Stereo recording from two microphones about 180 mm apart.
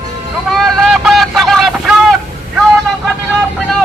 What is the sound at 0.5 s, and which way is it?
Vehicle, centre (ahead or behind).